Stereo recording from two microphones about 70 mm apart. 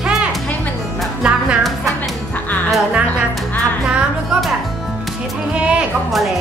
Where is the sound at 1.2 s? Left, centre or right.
Centre.